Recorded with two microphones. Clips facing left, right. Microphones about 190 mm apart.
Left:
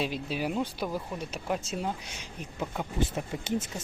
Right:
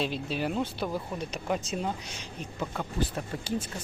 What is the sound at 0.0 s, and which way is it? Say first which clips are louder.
Speech: right 1 dB; 10° left (ahead or behind).